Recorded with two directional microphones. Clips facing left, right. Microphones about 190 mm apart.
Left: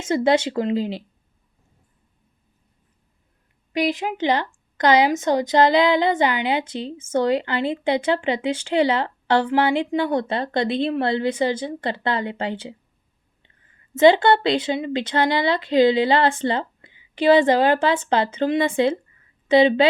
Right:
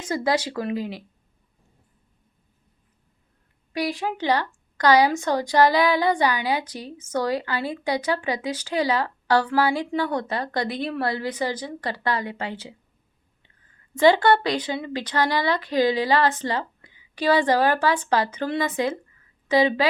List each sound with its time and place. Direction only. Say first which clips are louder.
0.0 s a woman's voice: left 5 dB; 25° left (ahead or behind)
3.7 s a woman's voice: left 4 dB; 20° left (ahead or behind)
13.9 s a woman's voice: left 3 dB; 25° left (ahead or behind)